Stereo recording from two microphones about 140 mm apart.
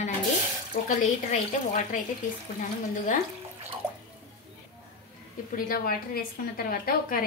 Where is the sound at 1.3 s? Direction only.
65° left (ahead or behind).